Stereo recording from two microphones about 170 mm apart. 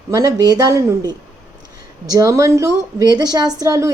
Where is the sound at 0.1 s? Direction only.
20° right (ahead or behind).